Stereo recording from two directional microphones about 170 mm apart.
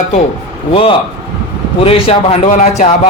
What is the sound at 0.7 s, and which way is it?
A man's voice, 30° left (ahead or behind).